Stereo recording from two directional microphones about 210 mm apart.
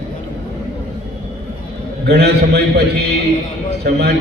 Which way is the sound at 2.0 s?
50° right (ahead or behind).